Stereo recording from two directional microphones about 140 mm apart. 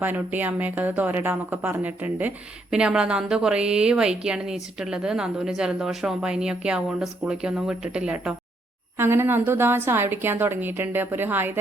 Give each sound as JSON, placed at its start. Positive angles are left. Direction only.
{"t": 0.0, "sound": "a woman's voice", "side_deg": -15}